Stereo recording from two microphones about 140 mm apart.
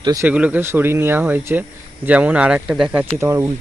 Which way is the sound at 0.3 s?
10° right (ahead or behind).